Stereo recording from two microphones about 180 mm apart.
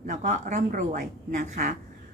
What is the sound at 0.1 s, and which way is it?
Speech, 45° right (ahead or behind).